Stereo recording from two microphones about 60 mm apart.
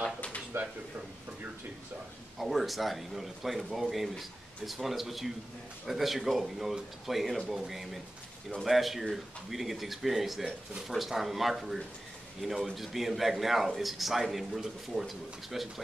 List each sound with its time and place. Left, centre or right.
0.5 s speech: right
2.3 s a man's voice: centre